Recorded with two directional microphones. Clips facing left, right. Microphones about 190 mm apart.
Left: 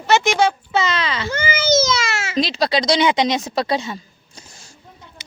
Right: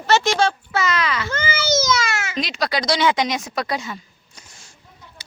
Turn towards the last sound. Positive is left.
turn(degrees=25)  # may be behind; listen again after turning